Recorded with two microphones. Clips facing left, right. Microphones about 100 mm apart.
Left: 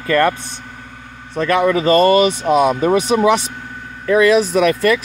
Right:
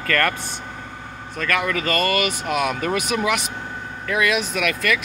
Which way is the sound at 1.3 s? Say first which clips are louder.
Left 8 dB; 25° left (ahead or behind).